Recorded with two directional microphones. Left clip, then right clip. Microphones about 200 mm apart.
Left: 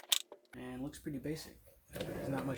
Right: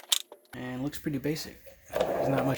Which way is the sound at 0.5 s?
35° right (ahead or behind).